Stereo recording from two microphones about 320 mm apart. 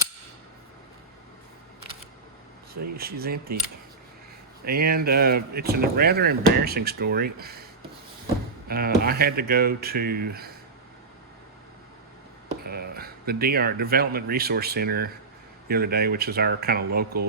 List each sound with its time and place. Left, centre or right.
2.9 s speech: right
4.6 s speech: right
12.6 s speech: right